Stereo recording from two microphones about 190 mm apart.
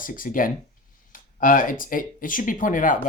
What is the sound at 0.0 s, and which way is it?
Speech, 45° left (ahead or behind).